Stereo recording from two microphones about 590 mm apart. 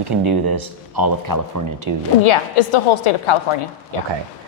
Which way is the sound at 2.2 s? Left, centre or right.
Left.